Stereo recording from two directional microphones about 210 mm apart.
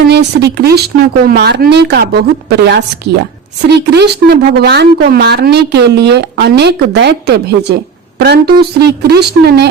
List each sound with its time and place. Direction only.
0.0 s speech: 50° right (ahead or behind)